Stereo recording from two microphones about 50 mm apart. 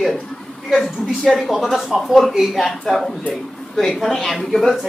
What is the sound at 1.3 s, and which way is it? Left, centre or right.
A woman's voice, centre.